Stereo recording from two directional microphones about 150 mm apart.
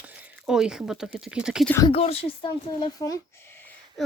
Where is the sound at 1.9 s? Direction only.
40° left (ahead or behind).